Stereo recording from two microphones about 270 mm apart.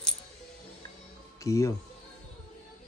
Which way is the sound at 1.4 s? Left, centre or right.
Centre.